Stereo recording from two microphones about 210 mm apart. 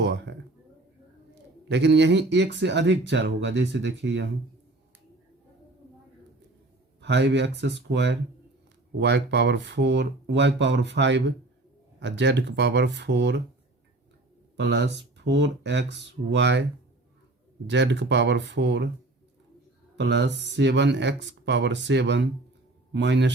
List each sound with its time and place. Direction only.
0.0 s a sound: 55° right (ahead or behind)
1.6 s speech: 55° right (ahead or behind)
7.0 s speech: 55° right (ahead or behind)
14.5 s speech: 55° right (ahead or behind)
17.7 s speech: 55° right (ahead or behind)
20.0 s a man's voice: 60° right (ahead or behind)